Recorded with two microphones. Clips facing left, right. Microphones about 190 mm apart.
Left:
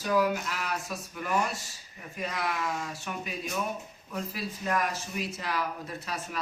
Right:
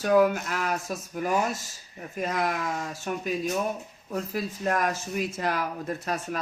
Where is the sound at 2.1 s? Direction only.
45° right (ahead or behind).